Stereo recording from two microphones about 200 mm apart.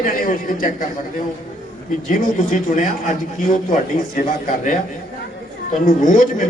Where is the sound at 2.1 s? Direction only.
40° left (ahead or behind).